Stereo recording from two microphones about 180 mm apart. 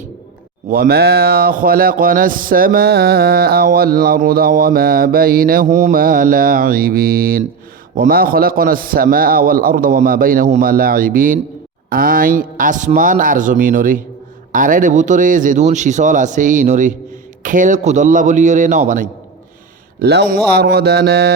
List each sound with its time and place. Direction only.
0.7 s a man's voice: 55° right (ahead or behind)
20.0 s speech: 65° right (ahead or behind)